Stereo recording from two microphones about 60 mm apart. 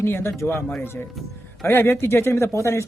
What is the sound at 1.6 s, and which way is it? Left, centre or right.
Speech, left.